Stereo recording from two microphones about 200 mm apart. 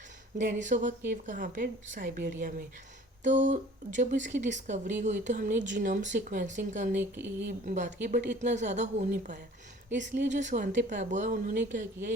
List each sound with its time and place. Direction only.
0.3 s speech: 40° right (ahead or behind)
7.0 s speech: 10° right (ahead or behind)
7.4 s speech: 45° right (ahead or behind)